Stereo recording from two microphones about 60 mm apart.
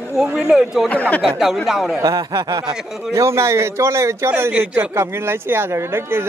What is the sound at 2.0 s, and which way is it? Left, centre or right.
Speech, right.